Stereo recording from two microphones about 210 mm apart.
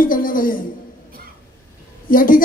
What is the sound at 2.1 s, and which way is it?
Speech, 40° left (ahead or behind).